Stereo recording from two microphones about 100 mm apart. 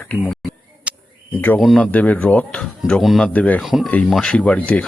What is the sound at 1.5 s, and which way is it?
Speech, centre (ahead or behind).